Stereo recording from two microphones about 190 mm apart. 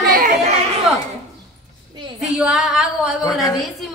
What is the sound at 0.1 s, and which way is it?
Chatter, 45° right (ahead or behind).